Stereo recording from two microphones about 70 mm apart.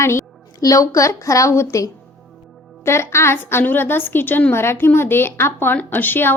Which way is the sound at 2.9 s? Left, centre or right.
Left.